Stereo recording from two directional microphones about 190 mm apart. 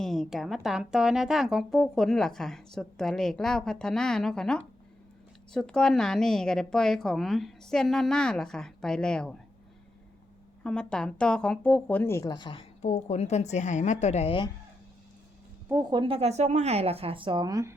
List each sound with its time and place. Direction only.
0.0 s speech: centre (ahead or behind)
10.6 s speech: 5° left (ahead or behind); by 14.5 s 25° left (ahead or behind)
15.7 s speech: 20° right (ahead or behind)